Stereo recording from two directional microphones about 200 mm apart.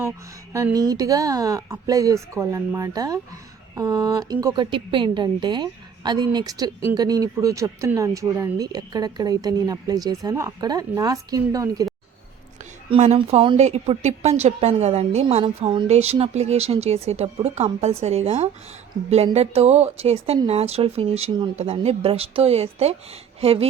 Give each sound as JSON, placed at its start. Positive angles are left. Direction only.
{"t": 0.5, "sound": "a woman's voice", "side_deg": -15}
{"t": 12.9, "sound": "a woman's voice", "side_deg": -30}